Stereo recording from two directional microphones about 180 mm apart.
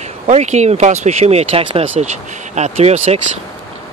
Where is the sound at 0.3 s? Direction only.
40° right (ahead or behind).